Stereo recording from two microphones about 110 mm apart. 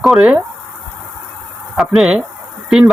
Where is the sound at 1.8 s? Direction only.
5° right (ahead or behind).